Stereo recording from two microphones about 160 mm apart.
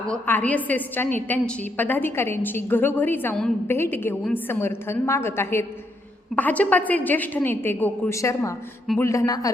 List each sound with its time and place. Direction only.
0.1 s a woman's voice: 10° left (ahead or behind)